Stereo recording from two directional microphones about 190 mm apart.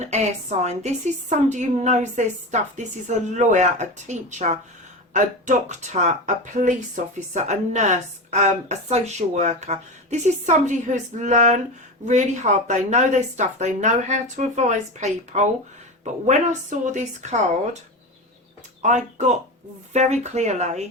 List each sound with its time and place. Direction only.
0.6 s a woman's voice: 35° right (ahead or behind)
18.8 s a woman's voice: 40° right (ahead or behind)